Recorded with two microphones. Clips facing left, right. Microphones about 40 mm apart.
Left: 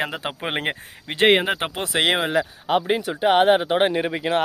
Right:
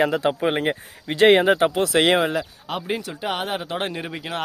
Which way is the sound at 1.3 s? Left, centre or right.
Centre.